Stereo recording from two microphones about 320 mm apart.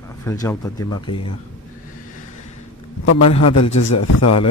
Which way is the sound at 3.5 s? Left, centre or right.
Left.